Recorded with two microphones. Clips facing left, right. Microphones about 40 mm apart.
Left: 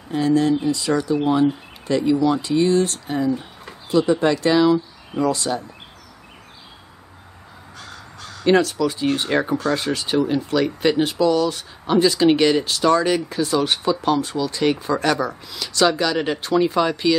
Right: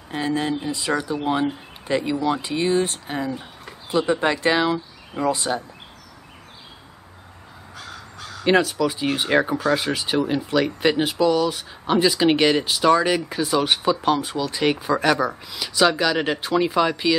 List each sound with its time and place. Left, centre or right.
0.1 s speech: right
7.7 s speech: centre